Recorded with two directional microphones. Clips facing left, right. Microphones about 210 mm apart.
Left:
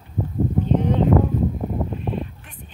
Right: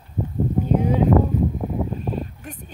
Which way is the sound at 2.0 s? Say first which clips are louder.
Even; 40° right (ahead or behind).